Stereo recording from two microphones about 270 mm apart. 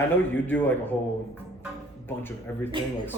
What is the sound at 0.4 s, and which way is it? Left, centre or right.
Speech, centre.